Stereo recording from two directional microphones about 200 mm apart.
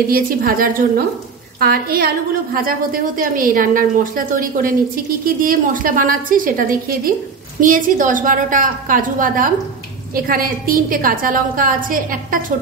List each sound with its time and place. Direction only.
0.1 s a woman's voice: 45° right (ahead or behind)